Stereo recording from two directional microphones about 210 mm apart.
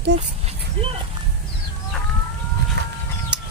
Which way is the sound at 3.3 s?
5° right (ahead or behind).